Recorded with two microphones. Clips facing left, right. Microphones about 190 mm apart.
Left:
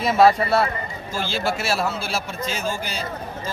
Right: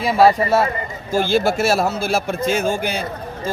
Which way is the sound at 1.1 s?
50° right (ahead or behind).